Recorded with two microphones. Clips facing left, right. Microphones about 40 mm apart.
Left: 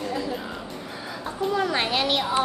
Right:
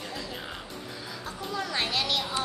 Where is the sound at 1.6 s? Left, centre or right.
Left.